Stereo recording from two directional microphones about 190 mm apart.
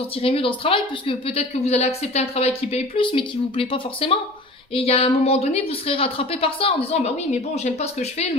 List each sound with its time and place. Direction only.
0.2 s a woman's voice: 30° left (ahead or behind)